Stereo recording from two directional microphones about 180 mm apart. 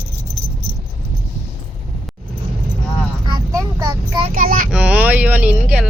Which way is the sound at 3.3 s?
15° right (ahead or behind).